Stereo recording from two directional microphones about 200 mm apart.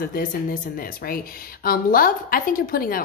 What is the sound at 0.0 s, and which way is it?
Speech, 45° left (ahead or behind).